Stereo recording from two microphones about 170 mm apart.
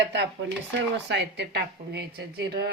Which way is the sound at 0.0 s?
80° right.